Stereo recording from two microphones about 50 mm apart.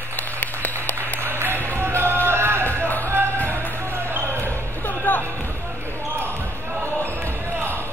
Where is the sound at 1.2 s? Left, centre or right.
Right.